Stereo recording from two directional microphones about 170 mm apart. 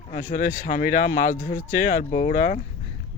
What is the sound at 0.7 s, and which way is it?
Speech, 45° left (ahead or behind).